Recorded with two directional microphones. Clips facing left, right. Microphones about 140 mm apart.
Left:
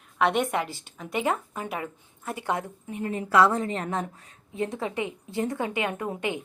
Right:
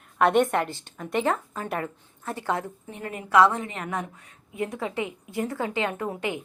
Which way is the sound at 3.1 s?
30° left (ahead or behind).